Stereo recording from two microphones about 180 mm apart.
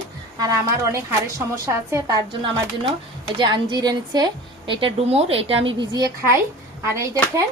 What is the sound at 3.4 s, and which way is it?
A woman's voice, 25° right (ahead or behind).